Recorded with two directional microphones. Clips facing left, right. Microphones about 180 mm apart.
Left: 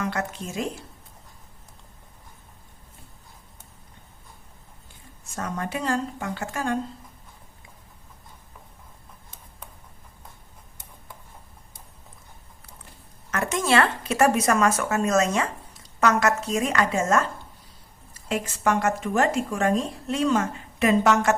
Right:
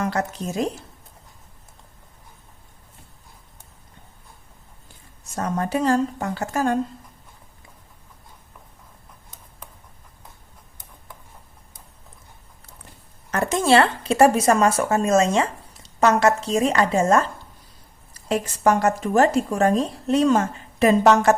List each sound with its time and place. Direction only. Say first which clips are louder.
0.0 s speech: right 4 dB; 40° right (ahead or behind)
5.2 s speech: right 5 dB; 40° right (ahead or behind)
13.3 s speech: right 5 dB; 30° right (ahead or behind)